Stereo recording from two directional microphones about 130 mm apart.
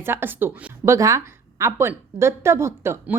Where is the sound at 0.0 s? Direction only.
15° right (ahead or behind).